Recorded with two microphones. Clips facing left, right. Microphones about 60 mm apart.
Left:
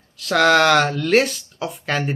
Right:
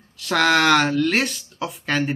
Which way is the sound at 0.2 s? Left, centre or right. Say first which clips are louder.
Left 3 dB; centre.